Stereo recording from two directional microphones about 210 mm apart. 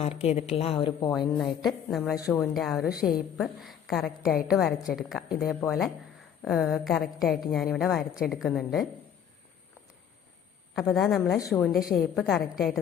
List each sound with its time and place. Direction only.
0.0 s a woman's voice: 30° left (ahead or behind)
1.6 s a woman's voice: centre (ahead or behind)
10.9 s a woman's voice: centre (ahead or behind)